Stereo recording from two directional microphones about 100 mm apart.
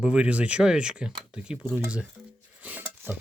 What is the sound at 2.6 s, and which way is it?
Dishes, 20° right (ahead or behind).